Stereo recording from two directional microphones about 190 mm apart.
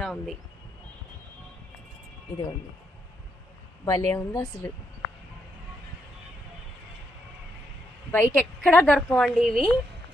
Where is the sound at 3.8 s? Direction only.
15° left (ahead or behind).